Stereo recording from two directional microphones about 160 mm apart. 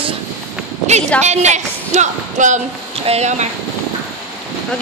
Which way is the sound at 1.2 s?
45° right (ahead or behind).